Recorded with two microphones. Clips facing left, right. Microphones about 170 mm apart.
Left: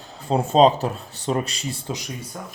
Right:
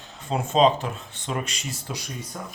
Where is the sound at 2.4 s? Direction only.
5° left (ahead or behind).